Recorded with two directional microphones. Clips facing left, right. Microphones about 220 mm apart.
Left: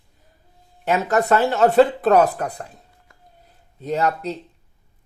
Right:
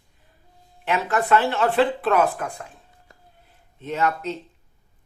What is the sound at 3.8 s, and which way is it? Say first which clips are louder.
Speech: left 3 dB; 35° left (ahead or behind).